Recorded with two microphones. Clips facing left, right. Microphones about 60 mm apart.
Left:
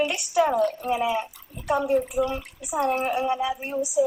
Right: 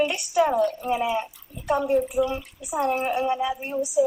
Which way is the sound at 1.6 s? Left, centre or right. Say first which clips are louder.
Right 1 dB; left.